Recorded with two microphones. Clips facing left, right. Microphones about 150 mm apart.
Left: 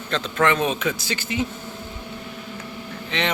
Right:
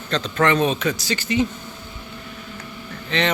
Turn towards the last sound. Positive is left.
turn(degrees=15)  # may be behind; listen again after turning